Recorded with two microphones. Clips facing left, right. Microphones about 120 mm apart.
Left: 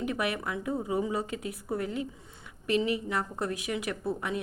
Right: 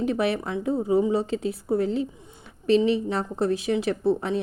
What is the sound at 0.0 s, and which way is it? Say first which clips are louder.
A woman's voice: right 7 dB; 30° right (ahead or behind).